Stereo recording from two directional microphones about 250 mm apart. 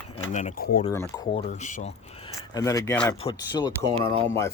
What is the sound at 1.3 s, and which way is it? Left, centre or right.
Speech, left.